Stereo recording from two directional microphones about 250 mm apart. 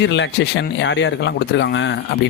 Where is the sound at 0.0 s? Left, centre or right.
Left.